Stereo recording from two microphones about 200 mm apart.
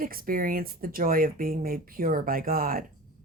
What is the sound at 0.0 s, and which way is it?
Speech, 45° right (ahead or behind).